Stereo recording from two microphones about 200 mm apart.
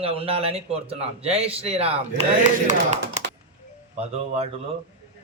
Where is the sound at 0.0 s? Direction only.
30° right (ahead or behind).